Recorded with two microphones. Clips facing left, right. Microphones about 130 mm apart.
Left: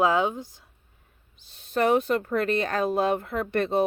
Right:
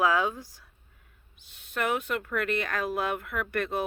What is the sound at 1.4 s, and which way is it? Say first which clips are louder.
Speech: left 7 dB; 30° left (ahead or behind).